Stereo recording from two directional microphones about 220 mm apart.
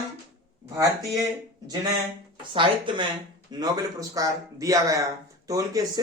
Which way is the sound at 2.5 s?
20° right (ahead or behind).